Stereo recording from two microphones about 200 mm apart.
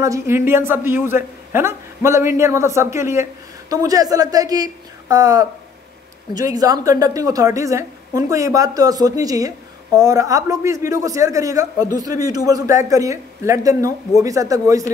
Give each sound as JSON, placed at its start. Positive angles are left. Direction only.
{"t": 0.0, "sound": "a woman's voice", "side_deg": -15}